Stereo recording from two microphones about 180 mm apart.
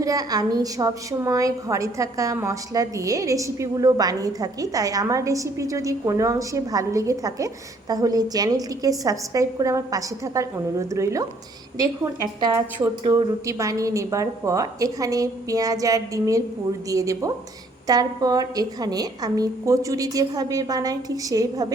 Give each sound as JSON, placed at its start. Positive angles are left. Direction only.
{"t": 0.0, "sound": "a woman's voice", "side_deg": -20}
{"t": 12.4, "sound": "a woman's voice", "side_deg": -20}